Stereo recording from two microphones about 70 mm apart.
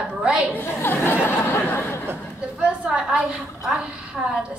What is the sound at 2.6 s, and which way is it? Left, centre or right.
A woman's voice, centre.